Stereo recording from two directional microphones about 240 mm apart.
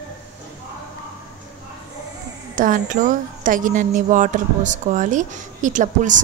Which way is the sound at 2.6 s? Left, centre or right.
Right.